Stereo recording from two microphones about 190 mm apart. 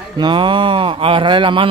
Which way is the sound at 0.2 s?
25° right (ahead or behind).